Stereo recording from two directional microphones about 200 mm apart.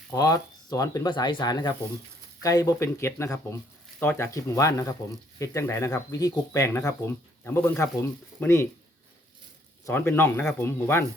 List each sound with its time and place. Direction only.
0.1 s speech: 15° left (ahead or behind)
9.8 s speech: 10° left (ahead or behind)